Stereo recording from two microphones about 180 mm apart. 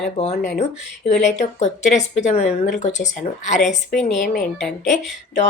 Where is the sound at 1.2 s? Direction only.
40° left (ahead or behind).